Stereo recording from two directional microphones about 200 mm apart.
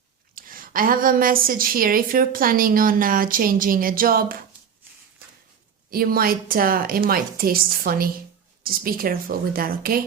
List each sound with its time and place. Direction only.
0.3 s a woman's voice: 45° right (ahead or behind)
5.9 s a woman's voice: 45° right (ahead or behind)